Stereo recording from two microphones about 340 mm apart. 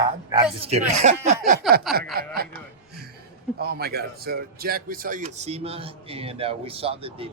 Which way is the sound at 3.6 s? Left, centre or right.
Right.